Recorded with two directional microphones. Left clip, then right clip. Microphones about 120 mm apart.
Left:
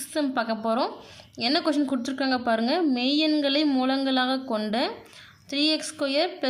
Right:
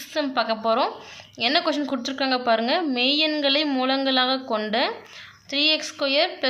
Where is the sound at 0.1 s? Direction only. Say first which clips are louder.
Right 3 dB; 60° left (ahead or behind).